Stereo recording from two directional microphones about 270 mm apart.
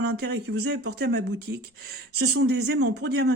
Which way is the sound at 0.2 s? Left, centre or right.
Right.